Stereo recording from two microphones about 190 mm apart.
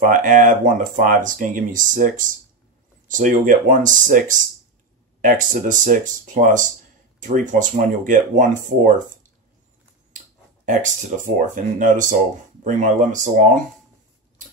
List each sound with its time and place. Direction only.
0.0 s speech: 45° right (ahead or behind)
10.6 s speech: 40° right (ahead or behind)